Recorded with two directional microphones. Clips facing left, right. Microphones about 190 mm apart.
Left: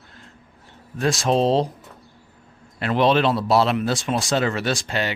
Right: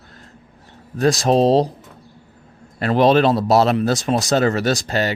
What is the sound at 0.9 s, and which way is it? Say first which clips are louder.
Speech: right 4 dB; 40° right (ahead or behind).